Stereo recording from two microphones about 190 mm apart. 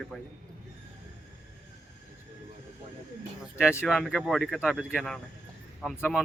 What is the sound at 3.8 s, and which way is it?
Speech, centre (ahead or behind).